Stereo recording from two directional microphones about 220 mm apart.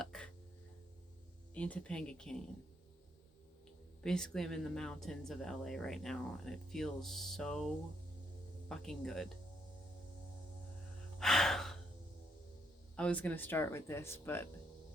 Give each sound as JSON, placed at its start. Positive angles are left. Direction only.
{"t": 0.0, "sound": "a sound", "side_deg": 5}
{"t": 1.5, "sound": "speech", "side_deg": 5}
{"t": 4.0, "sound": "speech", "side_deg": 5}
{"t": 8.7, "sound": "speech", "side_deg": 0}
{"t": 11.2, "sound": "gasp", "side_deg": 0}
{"t": 13.0, "sound": "speech", "side_deg": 5}